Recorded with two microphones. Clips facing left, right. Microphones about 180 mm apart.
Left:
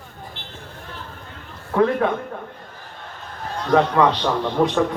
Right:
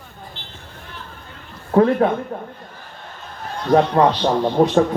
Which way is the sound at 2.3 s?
30° right (ahead or behind).